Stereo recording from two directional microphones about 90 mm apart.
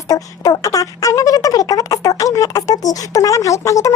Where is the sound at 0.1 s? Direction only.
40° left (ahead or behind).